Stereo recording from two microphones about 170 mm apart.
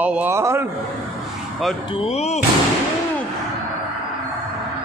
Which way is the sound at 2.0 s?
40° left (ahead or behind).